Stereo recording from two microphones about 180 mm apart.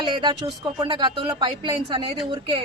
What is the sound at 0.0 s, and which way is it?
Speech, 25° right (ahead or behind).